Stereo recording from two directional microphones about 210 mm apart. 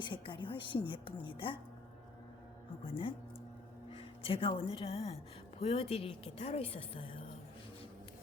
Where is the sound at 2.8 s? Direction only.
25° left (ahead or behind).